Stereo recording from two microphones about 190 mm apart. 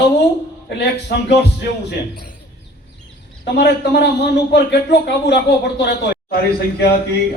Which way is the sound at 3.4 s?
65° left (ahead or behind).